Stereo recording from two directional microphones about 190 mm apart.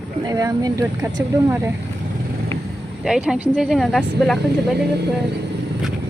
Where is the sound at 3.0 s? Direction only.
5° right (ahead or behind).